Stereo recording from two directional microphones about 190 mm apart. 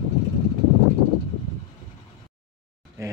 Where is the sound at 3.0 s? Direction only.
15° right (ahead or behind).